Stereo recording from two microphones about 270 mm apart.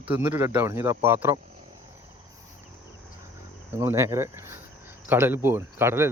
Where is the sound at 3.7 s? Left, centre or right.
Centre.